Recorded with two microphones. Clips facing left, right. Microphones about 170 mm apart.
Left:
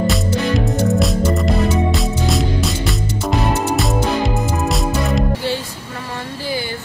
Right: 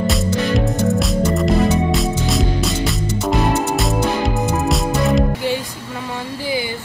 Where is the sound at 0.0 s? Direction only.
Centre (ahead or behind).